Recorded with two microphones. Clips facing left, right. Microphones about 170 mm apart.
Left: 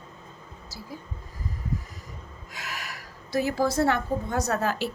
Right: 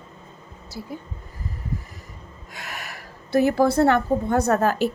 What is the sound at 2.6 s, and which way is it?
A woman's voice, 55° right (ahead or behind).